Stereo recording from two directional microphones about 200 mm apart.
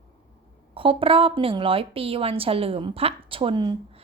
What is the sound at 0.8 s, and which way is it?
A woman's voice, 25° right (ahead or behind).